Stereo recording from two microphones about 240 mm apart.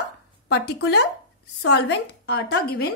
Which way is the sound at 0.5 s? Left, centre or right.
Left.